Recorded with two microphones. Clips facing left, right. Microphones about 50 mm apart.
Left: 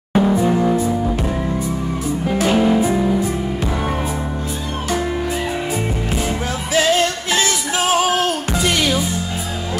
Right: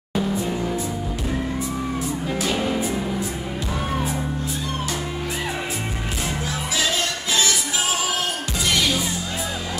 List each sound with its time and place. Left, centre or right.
0.1 s music: left
2.2 s music: left
2.5 s music: left
6.7 s music: left